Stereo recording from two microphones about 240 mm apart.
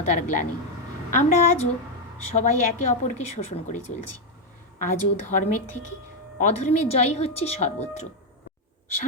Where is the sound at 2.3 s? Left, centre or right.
Left.